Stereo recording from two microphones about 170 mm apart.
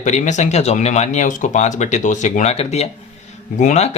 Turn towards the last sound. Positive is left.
turn(degrees=40)  # may be behind; listen again after turning